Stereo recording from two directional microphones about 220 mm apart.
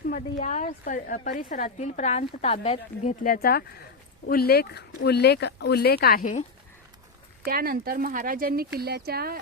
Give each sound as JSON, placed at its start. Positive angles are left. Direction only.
{"t": 0.1, "sound": "a woman's voice", "side_deg": 35}
{"t": 7.4, "sound": "speech", "side_deg": -45}